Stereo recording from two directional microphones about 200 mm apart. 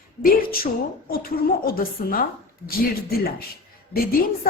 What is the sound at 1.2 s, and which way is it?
A woman's voice, 45° left (ahead or behind).